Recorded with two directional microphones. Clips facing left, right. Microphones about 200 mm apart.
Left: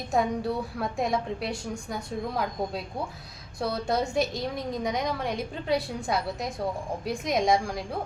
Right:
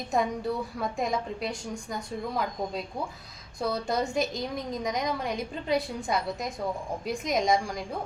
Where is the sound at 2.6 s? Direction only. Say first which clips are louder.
Left 1 dB; centre (ahead or behind).